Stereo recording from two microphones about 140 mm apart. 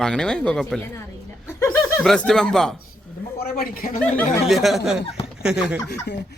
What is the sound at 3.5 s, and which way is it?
Speech, 90° left.